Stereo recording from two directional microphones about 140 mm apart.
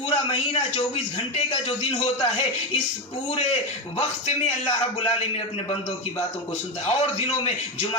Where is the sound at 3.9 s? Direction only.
50° left (ahead or behind).